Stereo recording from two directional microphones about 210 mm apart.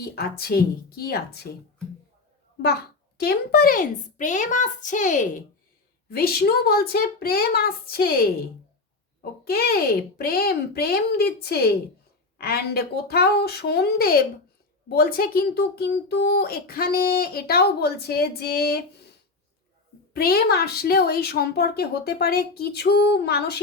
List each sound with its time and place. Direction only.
0.0 s speech: 50° left (ahead or behind)
3.2 s a woman's voice: 45° left (ahead or behind)
9.4 s speech: 45° left (ahead or behind)
20.1 s speech: 50° left (ahead or behind)